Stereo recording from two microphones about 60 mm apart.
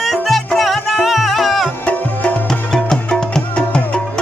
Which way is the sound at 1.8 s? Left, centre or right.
Left.